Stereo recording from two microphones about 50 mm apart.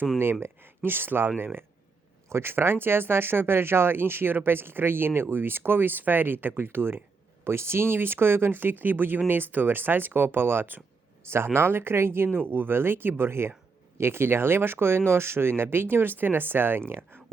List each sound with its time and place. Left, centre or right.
0.2 s speech: right
2.3 s speech: right
12.5 s speech: right